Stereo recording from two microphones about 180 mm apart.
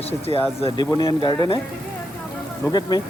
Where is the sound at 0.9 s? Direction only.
20° left (ahead or behind).